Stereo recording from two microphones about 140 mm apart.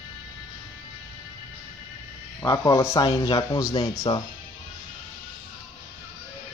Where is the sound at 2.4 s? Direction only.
20° left (ahead or behind).